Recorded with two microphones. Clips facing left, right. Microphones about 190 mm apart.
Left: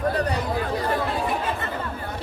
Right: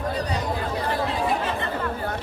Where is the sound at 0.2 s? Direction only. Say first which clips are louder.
Left 2 dB; 60° left (ahead or behind).